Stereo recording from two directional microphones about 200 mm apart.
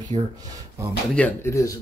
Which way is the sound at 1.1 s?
10° left (ahead or behind).